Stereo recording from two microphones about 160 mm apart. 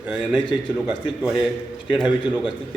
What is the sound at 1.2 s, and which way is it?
Speech, 5° right (ahead or behind).